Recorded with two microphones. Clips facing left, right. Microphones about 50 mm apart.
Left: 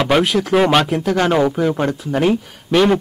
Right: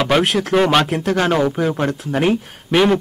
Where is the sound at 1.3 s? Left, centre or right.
Centre.